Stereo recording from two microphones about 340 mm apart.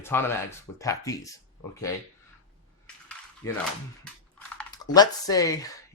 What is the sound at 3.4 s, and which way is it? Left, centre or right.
Speech, centre.